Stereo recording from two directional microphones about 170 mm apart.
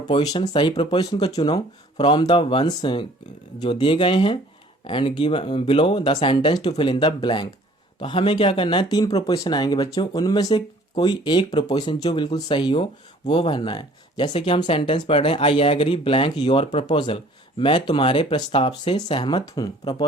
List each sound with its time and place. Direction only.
0.3 s speech: 25° left (ahead or behind)